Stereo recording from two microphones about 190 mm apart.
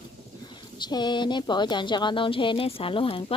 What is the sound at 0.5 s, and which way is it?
Speech, 25° left (ahead or behind).